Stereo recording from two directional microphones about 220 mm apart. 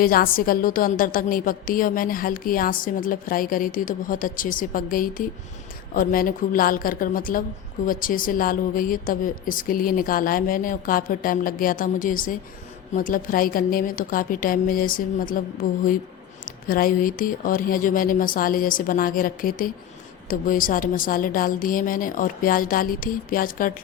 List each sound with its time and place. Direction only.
0.0 s a woman's voice: 40° left (ahead or behind)